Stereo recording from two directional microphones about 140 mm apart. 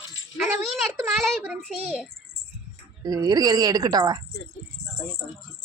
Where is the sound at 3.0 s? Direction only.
25° right (ahead or behind).